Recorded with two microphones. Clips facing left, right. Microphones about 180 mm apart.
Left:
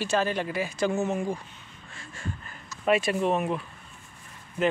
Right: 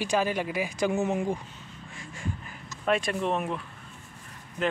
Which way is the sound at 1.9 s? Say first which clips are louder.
Right 1 dB; 15° right (ahead or behind).